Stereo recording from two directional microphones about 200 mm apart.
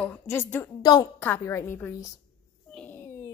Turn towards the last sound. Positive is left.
turn(degrees=10)  # may be behind; listen again after turning